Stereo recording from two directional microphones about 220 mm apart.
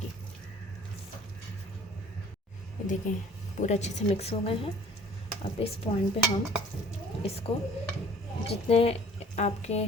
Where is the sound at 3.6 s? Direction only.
30° left (ahead or behind).